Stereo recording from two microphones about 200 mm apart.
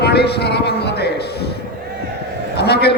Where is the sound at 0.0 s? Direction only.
55° left (ahead or behind).